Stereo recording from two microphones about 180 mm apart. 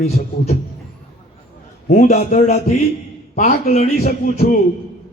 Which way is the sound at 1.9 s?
40° left (ahead or behind).